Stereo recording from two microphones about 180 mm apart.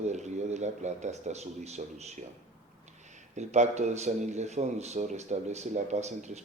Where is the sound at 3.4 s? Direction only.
40° right (ahead or behind).